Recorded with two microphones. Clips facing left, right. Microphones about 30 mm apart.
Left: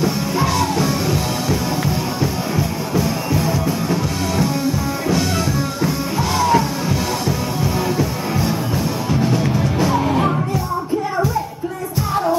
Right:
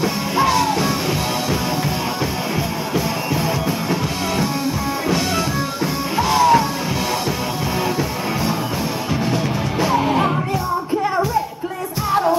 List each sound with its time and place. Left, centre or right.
0.0 s music: centre
6.1 s music: centre
9.1 s music: centre
12.1 s music: centre